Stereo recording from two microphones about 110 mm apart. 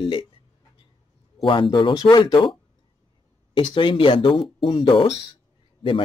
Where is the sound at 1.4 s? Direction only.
45° left (ahead or behind).